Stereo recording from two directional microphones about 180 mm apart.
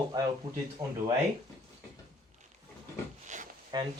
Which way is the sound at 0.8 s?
15° right (ahead or behind).